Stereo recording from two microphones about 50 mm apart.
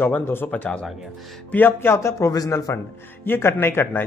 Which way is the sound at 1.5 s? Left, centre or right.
Left.